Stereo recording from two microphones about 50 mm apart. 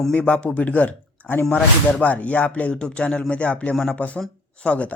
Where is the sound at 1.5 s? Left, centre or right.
Left.